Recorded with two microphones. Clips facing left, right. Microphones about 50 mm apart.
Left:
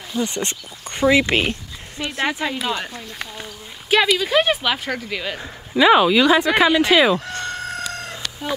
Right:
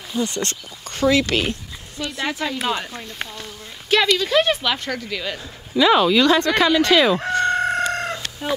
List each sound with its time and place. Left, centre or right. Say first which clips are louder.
0.2 s speech: even; left
3.9 s speech: left 1 dB; centre
7.2 s chicken: right 8 dB; right
8.1 s chicken: right 2 dB; centre